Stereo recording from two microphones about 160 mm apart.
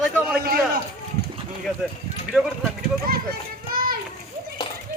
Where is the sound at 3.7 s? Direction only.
65° right (ahead or behind).